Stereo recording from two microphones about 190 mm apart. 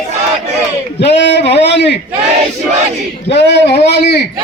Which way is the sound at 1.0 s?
65° left (ahead or behind).